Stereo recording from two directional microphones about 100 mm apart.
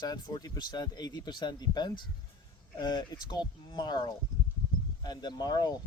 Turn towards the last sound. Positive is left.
turn(degrees=45)  # may be behind; listen again after turning